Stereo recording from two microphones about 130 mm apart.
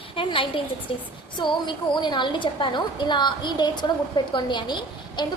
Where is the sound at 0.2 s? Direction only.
40° left (ahead or behind).